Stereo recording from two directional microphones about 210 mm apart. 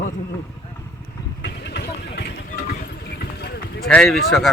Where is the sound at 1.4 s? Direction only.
50° left (ahead or behind).